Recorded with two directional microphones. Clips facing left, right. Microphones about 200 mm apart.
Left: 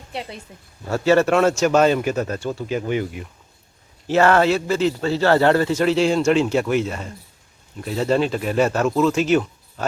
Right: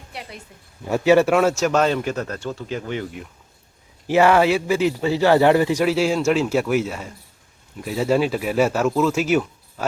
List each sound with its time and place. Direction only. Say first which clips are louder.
0.1 s a woman's voice: left 6 dB; 25° left (ahead or behind)
0.9 s a man's voice: right 1 dB; 15° right (ahead or behind); by 3.2 s 5° left (ahead or behind)
4.0 s speech: even; 15° right (ahead or behind)